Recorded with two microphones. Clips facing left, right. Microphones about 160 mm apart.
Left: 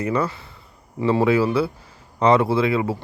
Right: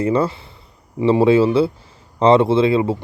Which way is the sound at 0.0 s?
30° right (ahead or behind).